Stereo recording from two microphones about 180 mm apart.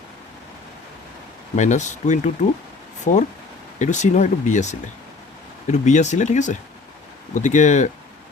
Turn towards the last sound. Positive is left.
turn(degrees=40)  # may be behind; listen again after turning